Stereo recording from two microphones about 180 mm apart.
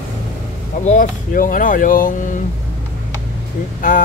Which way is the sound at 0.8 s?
50° left (ahead or behind).